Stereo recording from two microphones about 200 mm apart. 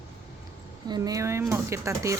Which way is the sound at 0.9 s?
15° right (ahead or behind).